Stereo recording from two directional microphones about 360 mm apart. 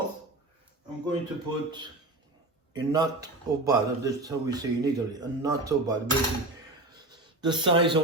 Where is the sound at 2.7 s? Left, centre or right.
Centre.